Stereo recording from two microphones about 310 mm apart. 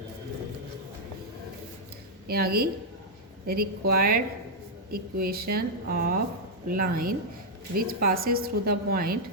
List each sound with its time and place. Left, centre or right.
2.2 s a woman's voice: right